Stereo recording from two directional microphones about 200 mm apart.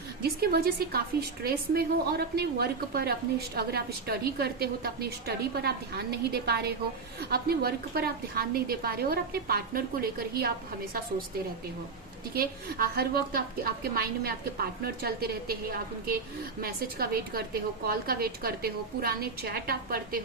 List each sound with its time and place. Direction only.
0.2 s a woman's voice: 50° right (ahead or behind)
12.3 s a woman's voice: 50° right (ahead or behind)